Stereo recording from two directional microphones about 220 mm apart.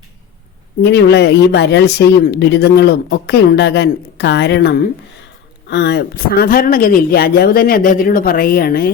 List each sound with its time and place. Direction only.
0.8 s speech: 50° left (ahead or behind)